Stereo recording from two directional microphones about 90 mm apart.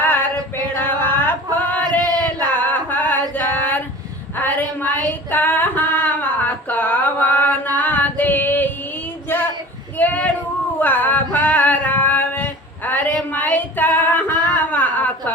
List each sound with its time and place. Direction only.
0.0 s female singing: 20° left (ahead or behind)
0.8 s a sound: 25° left (ahead or behind)
2.6 s female singing: 20° left (ahead or behind)
10.8 s male singing: 20° left (ahead or behind)
13.3 s female singing: 20° left (ahead or behind)